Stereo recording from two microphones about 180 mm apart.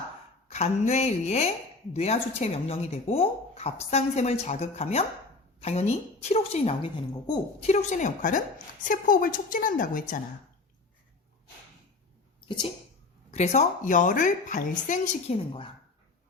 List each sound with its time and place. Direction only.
0.5 s a woman's voice: 40° left (ahead or behind)
13.3 s a woman's voice: 40° left (ahead or behind)